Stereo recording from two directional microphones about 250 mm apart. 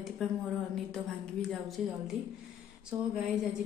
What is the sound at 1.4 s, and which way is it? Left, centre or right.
Speech, centre.